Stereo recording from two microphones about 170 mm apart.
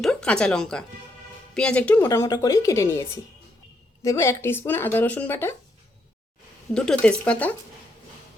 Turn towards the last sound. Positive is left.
turn(degrees=5)  # may be behind; listen again after turning